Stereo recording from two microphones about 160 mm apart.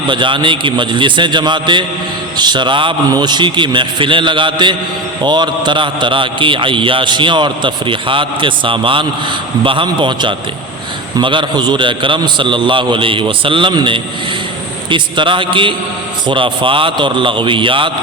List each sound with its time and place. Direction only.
0.1 s a man's voice: 30° right (ahead or behind)